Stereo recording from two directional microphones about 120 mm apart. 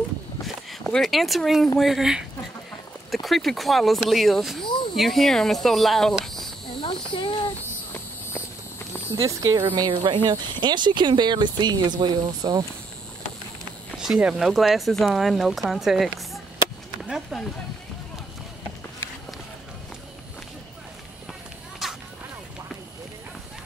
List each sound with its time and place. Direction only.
0.8 s speech: 5° left (ahead or behind)
6.8 s a sound: 45° left (ahead or behind)
7.9 s walk: 20° left (ahead or behind)
9.1 s speech: 30° right (ahead or behind)
9.8 s speech: 40° right (ahead or behind)
13.9 s speech: 5° right (ahead or behind)
17.1 s speech: centre (ahead or behind)
21.3 s run: centre (ahead or behind)